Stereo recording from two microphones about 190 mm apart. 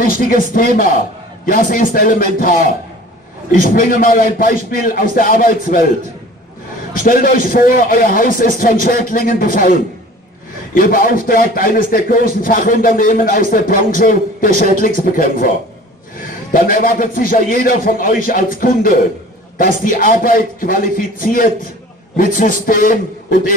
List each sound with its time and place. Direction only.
0.0 s a man's voice: 50° left (ahead or behind)
3.7 s a man's voice: 50° left (ahead or behind)
6.9 s a man's voice: 50° left (ahead or behind)
16.5 s a man's voice: 45° left (ahead or behind)